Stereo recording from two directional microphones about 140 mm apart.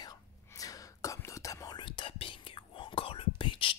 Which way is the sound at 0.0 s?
25° left (ahead or behind).